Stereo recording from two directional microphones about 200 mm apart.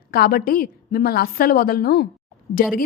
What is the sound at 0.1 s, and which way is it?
A woman's voice, 50° left (ahead or behind).